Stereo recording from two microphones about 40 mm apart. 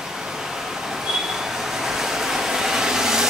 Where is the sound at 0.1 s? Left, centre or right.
Centre.